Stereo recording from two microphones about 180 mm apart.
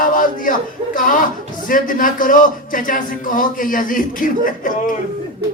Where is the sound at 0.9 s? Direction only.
50° left (ahead or behind).